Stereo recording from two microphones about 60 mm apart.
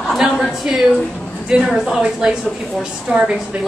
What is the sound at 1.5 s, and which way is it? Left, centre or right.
Speech, centre.